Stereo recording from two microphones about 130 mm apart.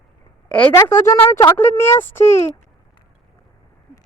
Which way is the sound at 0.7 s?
20° left (ahead or behind).